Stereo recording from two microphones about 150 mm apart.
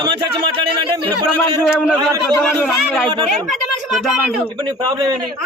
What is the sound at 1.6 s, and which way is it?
A man's voice, 5° right (ahead or behind).